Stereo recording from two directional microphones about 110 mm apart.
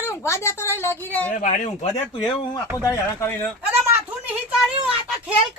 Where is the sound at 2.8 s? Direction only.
30° left (ahead or behind).